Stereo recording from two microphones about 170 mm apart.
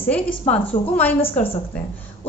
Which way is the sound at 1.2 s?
35° left (ahead or behind).